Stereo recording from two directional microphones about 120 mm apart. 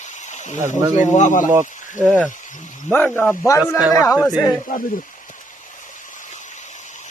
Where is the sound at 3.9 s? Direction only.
30° left (ahead or behind).